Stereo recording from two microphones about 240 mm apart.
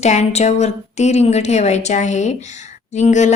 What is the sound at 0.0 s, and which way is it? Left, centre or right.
A woman's voice, left.